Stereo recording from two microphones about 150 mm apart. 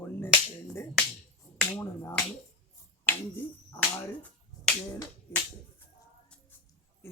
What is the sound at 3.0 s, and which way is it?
Speech, 15° left (ahead or behind).